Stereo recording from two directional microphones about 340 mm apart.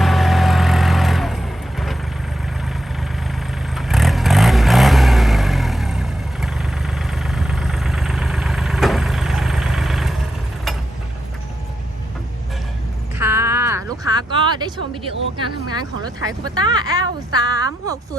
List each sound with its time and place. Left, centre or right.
0.0 s vehicle: centre
3.8 s vehicle: centre
13.1 s a sound: centre
15.7 s speech: centre